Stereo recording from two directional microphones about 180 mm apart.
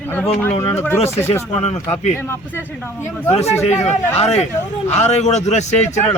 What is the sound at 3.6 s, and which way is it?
A man's voice, 40° left (ahead or behind).